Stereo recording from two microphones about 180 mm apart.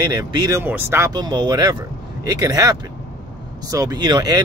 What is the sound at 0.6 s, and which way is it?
Speech, 10° right (ahead or behind).